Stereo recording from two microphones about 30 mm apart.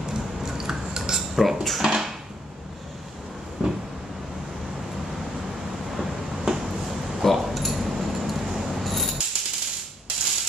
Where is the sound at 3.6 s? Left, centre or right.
Centre.